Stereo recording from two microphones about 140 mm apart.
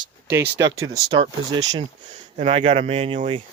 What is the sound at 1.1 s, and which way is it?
Speech, 35° right (ahead or behind).